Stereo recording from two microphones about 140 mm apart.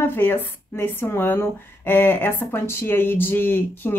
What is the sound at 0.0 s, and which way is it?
Speech, 15° left (ahead or behind).